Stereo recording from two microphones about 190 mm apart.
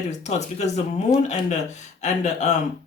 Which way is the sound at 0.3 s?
35° left (ahead or behind).